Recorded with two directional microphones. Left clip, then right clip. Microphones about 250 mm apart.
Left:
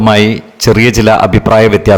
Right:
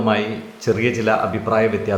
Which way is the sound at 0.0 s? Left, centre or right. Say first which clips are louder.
Left 11 dB; left.